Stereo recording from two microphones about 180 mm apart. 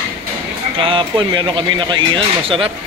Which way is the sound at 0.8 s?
30° right (ahead or behind).